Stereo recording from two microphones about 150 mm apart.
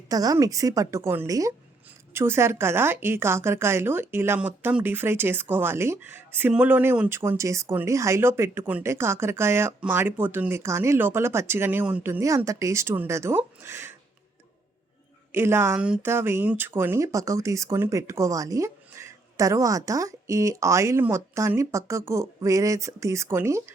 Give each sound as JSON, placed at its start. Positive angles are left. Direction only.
{"t": 0.1, "sound": "speech", "side_deg": -25}
{"t": 15.3, "sound": "speech", "side_deg": -15}